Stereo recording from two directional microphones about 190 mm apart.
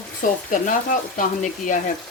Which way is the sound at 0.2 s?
45° left (ahead or behind).